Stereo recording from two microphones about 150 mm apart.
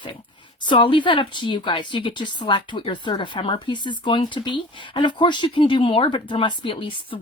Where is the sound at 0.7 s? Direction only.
35° left (ahead or behind).